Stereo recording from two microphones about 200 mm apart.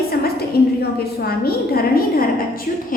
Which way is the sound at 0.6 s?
50° left (ahead or behind).